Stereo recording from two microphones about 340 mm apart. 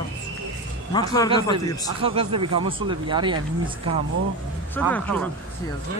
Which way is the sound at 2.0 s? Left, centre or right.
Centre.